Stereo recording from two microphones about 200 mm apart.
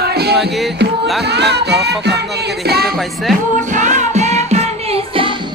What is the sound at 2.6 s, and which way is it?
Speech, 50° right (ahead or behind).